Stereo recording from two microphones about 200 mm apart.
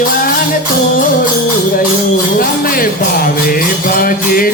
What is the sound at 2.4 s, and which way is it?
Jingle bell, 45° left (ahead or behind).